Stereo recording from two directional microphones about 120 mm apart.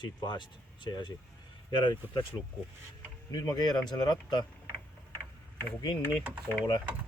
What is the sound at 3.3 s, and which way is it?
Speech, 30° left (ahead or behind).